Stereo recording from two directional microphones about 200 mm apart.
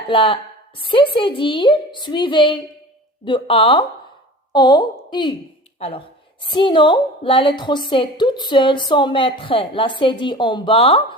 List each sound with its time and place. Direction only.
0.1 s a woman's voice: 25° left (ahead or behind)
6.4 s a woman's voice: 25° left (ahead or behind)